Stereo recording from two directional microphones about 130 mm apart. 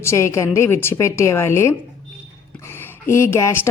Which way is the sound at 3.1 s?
20° left (ahead or behind).